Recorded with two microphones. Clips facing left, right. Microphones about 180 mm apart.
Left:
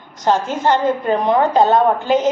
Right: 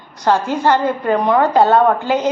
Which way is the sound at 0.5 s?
20° left (ahead or behind).